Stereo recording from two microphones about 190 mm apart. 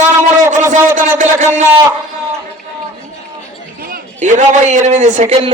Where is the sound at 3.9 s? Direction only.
40° right (ahead or behind).